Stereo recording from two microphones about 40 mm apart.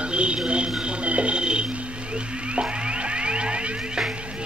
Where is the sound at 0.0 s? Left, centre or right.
Right.